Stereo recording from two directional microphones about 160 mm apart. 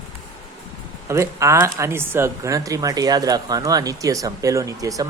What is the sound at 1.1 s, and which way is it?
Speech, 20° right (ahead or behind).